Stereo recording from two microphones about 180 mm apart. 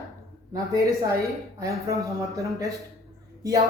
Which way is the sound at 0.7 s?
15° right (ahead or behind).